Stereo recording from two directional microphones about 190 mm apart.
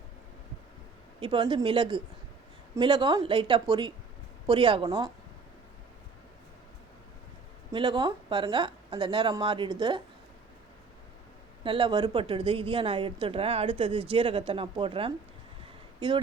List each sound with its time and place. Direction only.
1.2 s a woman's voice: 25° right (ahead or behind)
7.7 s a woman's voice: 25° right (ahead or behind)
11.6 s a woman's voice: 25° right (ahead or behind)